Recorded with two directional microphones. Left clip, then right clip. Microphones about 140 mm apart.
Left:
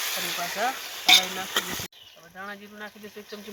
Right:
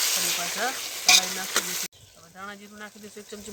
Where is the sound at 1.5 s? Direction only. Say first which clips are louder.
Right 1 dB; 20° right (ahead or behind).